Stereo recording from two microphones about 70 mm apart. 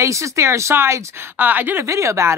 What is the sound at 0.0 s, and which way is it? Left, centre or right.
Speech, right.